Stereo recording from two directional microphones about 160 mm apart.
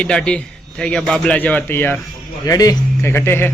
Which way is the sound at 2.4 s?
25° left (ahead or behind).